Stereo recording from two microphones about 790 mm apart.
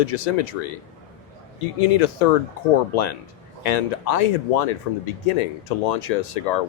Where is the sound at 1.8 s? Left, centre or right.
Left.